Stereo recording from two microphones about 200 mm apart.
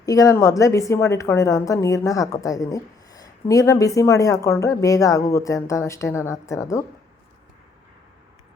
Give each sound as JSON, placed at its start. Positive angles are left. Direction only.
{"t": 0.0, "sound": "a woman's voice", "side_deg": 15}